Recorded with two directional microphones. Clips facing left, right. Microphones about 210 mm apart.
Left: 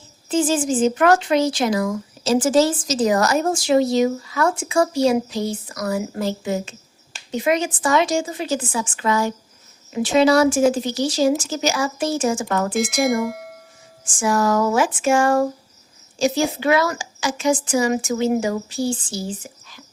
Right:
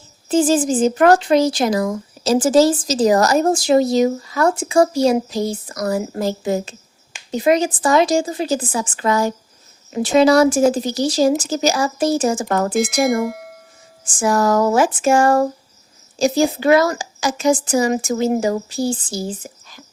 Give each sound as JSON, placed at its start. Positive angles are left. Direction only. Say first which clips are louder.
{"t": 0.3, "sound": "speech", "louder": "right 4 dB", "side_deg": -35}
{"t": 12.7, "sound": "speech", "louder": "right 2 dB", "side_deg": 0}
{"t": 14.0, "sound": "speech", "louder": "right 2 dB", "side_deg": -40}